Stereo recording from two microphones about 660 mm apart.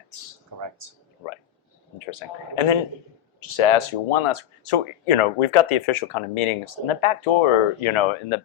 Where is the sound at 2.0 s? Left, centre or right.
Left.